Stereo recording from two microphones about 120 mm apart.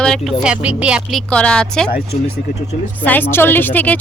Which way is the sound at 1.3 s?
10° left (ahead or behind).